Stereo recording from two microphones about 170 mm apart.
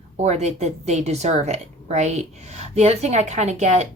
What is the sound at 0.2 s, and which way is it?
Speech, 40° right (ahead or behind).